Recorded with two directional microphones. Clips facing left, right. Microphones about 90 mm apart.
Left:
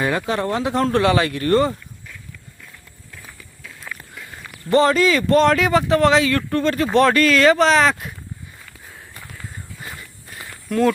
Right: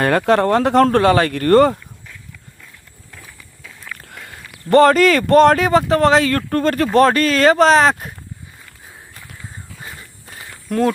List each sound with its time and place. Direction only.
0.0 s speech: 55° right (ahead or behind)
4.7 s speech: 55° right (ahead or behind)
10.7 s speech: 40° right (ahead or behind)